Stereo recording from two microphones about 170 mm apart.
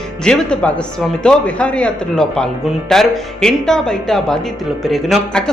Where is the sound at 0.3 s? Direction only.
5° left (ahead or behind).